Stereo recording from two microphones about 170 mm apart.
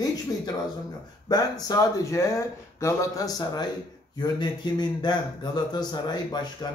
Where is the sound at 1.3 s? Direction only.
25° left (ahead or behind).